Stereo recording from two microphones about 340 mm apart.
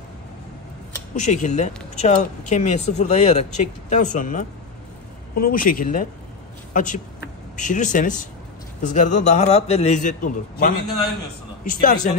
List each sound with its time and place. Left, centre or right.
1.1 s speech: left
11.8 s speech: left